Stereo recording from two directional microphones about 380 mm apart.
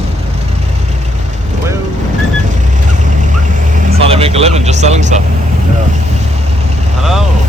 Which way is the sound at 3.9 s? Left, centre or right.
Centre.